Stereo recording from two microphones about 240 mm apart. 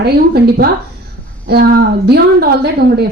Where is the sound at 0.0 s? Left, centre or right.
Right.